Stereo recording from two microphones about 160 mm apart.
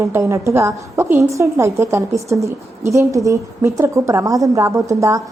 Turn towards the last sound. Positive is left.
turn(degrees=-20)  # may be behind; listen again after turning